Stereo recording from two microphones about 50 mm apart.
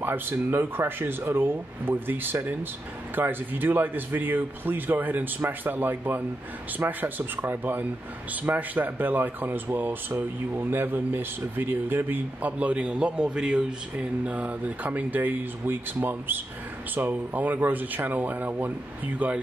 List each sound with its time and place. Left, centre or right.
0.0 s speech: right